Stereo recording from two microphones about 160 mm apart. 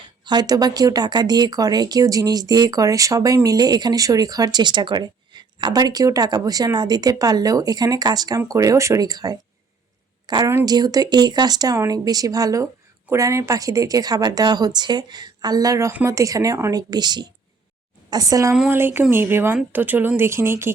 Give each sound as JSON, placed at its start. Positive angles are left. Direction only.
{"t": 0.3, "sound": "speech", "side_deg": -25}
{"t": 18.5, "sound": "speech", "side_deg": -10}